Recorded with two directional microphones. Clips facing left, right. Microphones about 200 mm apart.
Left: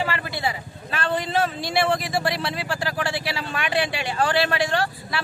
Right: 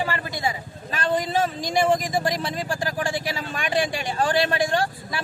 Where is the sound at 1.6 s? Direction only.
45° right (ahead or behind).